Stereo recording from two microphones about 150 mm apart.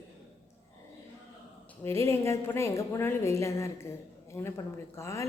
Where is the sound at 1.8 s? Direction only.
15° left (ahead or behind).